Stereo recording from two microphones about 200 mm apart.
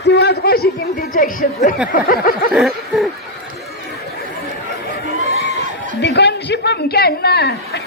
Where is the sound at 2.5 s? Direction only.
Centre (ahead or behind).